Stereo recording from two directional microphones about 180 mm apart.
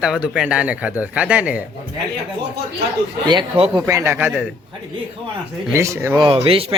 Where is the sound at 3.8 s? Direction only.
15° right (ahead or behind).